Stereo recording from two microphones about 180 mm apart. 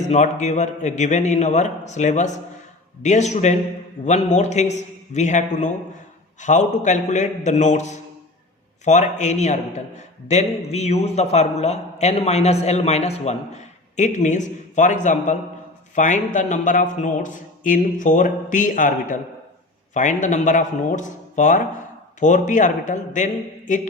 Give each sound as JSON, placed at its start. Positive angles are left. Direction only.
{"t": 0.0, "sound": "a man's voice", "side_deg": 40}